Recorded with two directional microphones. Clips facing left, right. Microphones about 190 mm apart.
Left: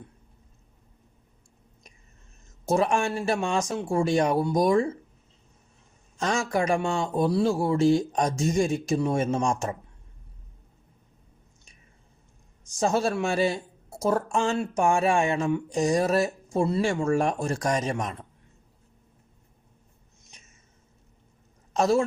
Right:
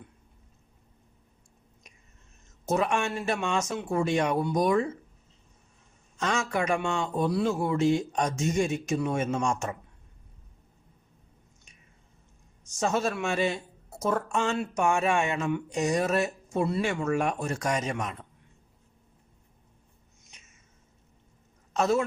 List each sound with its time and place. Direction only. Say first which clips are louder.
2.6 s speech: left 3 dB; 35° left (ahead or behind)
6.1 s speech: left 3 dB; 35° left (ahead or behind)
12.6 s speech: left 3 dB; 35° left (ahead or behind)
21.7 s a man's voice: left 3 dB; 35° left (ahead or behind)